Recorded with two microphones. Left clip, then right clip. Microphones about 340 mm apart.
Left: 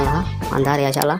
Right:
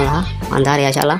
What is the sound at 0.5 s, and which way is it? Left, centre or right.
Speech, left.